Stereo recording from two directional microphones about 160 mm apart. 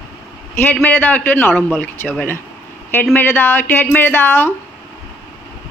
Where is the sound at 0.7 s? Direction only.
10° left (ahead or behind).